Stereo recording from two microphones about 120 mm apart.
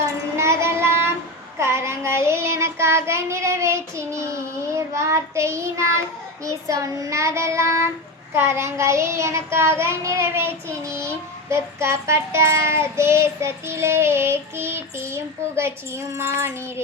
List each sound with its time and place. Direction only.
0.3 s child singing: 20° right (ahead or behind)